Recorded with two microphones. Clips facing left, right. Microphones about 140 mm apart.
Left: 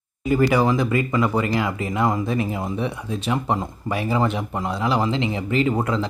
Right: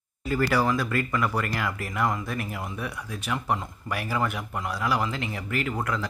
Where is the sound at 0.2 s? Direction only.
15° left (ahead or behind).